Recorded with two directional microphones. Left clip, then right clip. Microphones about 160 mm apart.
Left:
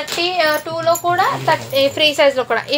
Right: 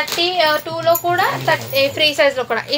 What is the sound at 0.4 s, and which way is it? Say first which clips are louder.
Speech: left 1 dB; 10° left (ahead or behind).